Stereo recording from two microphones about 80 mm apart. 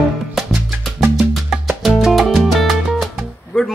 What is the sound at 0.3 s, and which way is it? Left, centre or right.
Music, centre.